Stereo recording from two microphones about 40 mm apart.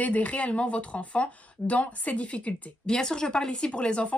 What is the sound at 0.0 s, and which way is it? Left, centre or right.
Speech, left.